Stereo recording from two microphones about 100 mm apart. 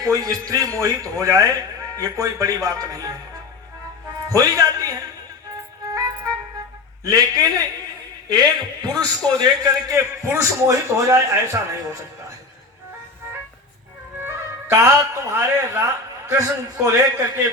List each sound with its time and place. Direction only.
0.0 s a man's voice: 35° right (ahead or behind)
4.4 s a man's voice: 35° right (ahead or behind)
5.8 s music: 35° right (ahead or behind)
7.0 s a man's voice: 35° right (ahead or behind)
14.2 s music: 25° right (ahead or behind)
16.7 s a man's voice: 25° right (ahead or behind)